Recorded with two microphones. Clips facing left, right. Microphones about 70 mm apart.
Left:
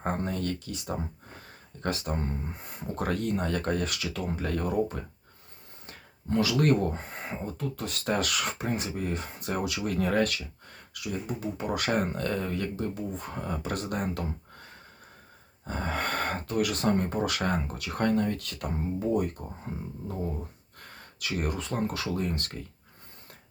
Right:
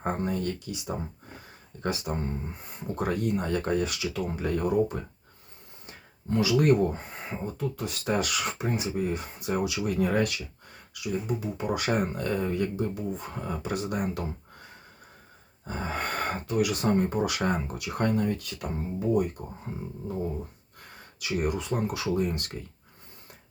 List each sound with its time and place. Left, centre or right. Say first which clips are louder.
0.0 s speech: right 1 dB; centre
6.3 s speech: right 2 dB; centre
15.6 s speech: left 1 dB; centre
21.2 s speech: right 3 dB; centre